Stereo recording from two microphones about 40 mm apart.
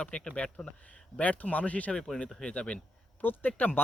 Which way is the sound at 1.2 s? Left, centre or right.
Left.